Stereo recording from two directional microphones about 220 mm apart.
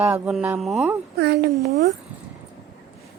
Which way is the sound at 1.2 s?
45° right (ahead or behind).